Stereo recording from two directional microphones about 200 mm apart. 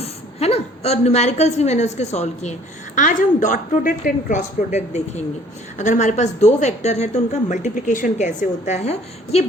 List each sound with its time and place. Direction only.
0.0 s a woman's voice: 30° left (ahead or behind)